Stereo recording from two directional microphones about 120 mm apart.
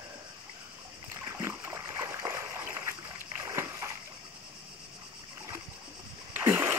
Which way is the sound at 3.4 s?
25° right (ahead or behind).